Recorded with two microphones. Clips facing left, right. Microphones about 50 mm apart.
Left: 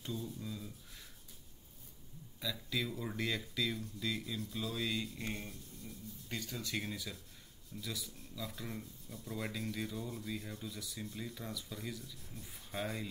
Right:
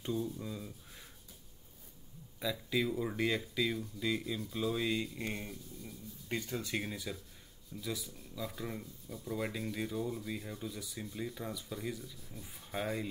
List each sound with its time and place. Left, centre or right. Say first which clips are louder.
0.0 s speech: right 6 dB; centre
2.4 s speech: right 5 dB; centre
6.2 s speech: right 5 dB; centre